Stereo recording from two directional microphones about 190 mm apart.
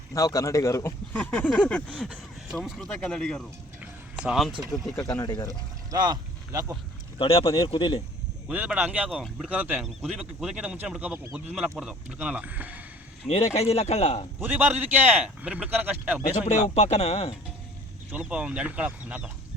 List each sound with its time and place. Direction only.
0.1 s speech: 20° left (ahead or behind); by 4.9 s centre (ahead or behind)
4.9 s speech: 15° left (ahead or behind)
5.9 s speech: 20° right (ahead or behind)
7.2 s speech: 30° left (ahead or behind)
8.4 s speech: 5° right (ahead or behind)
13.2 s a man's voice: 35° left (ahead or behind)
14.4 s speech: 10° right (ahead or behind)
16.5 s a man's voice: 35° left (ahead or behind)
18.1 s speech: 5° right (ahead or behind)